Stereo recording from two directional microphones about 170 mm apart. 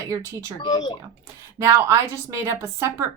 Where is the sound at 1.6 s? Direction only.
20° right (ahead or behind).